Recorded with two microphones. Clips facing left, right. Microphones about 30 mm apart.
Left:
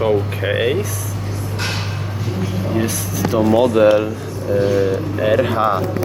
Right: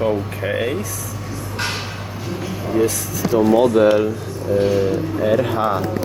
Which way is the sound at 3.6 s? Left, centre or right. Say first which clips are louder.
Left 3 dB; left.